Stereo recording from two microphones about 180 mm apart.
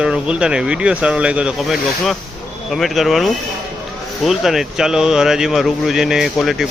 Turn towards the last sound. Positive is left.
turn(degrees=0)  # may be behind; listen again after turning